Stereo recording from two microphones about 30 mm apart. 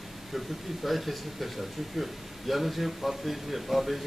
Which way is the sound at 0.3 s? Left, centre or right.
Centre.